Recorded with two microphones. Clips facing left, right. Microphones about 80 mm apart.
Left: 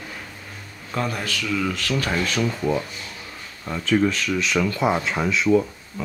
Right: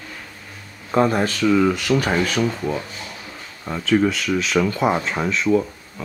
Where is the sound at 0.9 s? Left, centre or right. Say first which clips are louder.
Right 9 dB; right.